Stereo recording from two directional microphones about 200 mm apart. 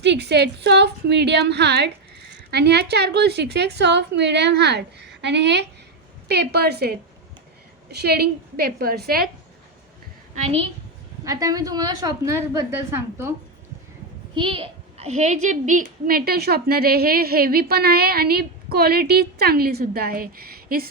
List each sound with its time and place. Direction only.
0.0 s a woman's voice: 60° right (ahead or behind)
10.3 s a woman's voice: 30° right (ahead or behind)
11.3 s a woman's voice: 15° right (ahead or behind)
14.3 s a woman's voice: 25° right (ahead or behind); by 20.8 s 50° right (ahead or behind)